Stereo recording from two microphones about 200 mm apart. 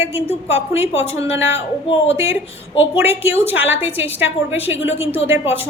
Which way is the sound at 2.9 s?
10° right (ahead or behind).